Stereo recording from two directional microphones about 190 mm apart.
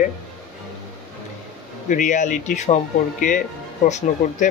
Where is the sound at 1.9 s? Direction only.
40° left (ahead or behind).